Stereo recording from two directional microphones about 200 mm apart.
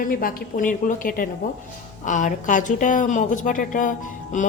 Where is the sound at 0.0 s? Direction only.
45° left (ahead or behind).